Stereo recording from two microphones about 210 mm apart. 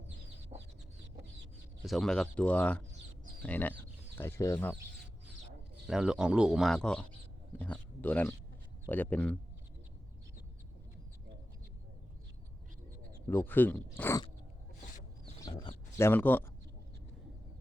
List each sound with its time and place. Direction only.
0.5 s chicken: 30° right (ahead or behind)
1.8 s speech: centre (ahead or behind)
5.9 s speech: 5° right (ahead or behind)
13.2 s speech: 10° left (ahead or behind)
15.4 s a sound: 20° left (ahead or behind)
16.0 s speech: 10° left (ahead or behind)